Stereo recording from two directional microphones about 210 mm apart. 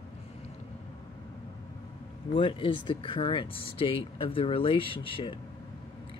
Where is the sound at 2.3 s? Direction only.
25° left (ahead or behind).